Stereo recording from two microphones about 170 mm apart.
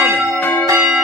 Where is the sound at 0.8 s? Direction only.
5° right (ahead or behind).